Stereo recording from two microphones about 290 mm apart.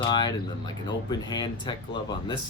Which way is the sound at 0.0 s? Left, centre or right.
Centre.